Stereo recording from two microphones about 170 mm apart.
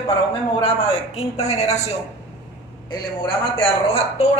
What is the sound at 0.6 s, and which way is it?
A man's voice, 35° left (ahead or behind).